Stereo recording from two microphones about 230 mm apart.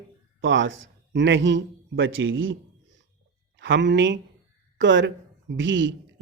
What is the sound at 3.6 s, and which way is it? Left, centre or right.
Speech, right.